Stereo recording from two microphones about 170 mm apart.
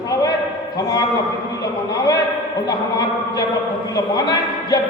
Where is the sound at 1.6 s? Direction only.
20° left (ahead or behind).